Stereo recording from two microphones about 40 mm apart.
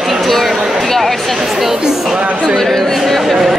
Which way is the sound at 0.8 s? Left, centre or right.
Centre.